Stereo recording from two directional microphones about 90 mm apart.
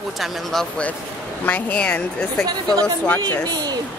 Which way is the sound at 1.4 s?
15° left (ahead or behind).